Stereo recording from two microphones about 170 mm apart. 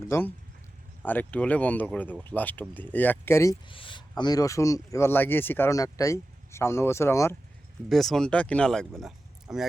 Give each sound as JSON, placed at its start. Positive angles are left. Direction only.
{"t": 0.1, "sound": "speech", "side_deg": 10}
{"t": 3.7, "sound": "speech", "side_deg": 30}
{"t": 7.9, "sound": "speech", "side_deg": 0}
{"t": 9.0, "sound": "a sound", "side_deg": 0}